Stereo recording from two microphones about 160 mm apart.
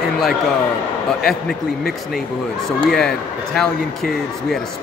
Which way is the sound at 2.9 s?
5° left (ahead or behind).